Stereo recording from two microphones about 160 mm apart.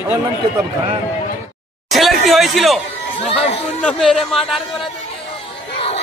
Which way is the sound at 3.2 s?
40° left (ahead or behind).